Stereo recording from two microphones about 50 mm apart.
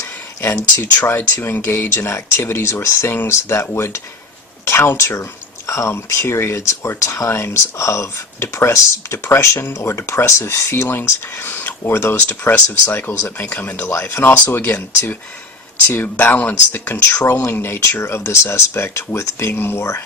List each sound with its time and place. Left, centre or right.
0.8 s speech: left
1.9 s speech: left
2.6 s speech: left
7.3 s speech: left
10.8 s speech: left
13.4 s speech: left
17.5 s speech: left
19.5 s speech: left